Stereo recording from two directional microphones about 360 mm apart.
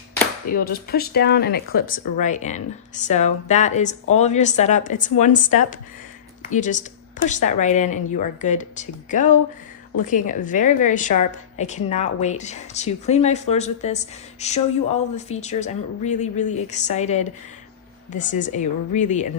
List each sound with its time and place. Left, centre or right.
0.5 s a woman's voice: left